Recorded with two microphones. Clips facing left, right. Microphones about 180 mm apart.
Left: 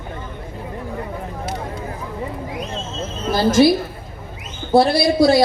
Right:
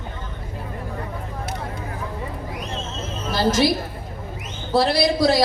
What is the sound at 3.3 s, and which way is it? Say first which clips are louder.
Speech: left 5 dB; 50° left (ahead or behind).